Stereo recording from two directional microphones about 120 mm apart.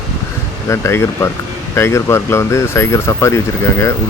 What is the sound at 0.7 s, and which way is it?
Speech, 25° left (ahead or behind).